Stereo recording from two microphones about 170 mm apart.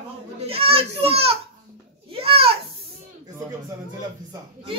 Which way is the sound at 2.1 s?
35° right (ahead or behind).